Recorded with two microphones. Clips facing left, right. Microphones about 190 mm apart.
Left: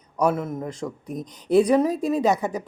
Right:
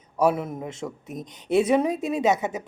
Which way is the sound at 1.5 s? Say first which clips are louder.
Left 3 dB; 5° right (ahead or behind).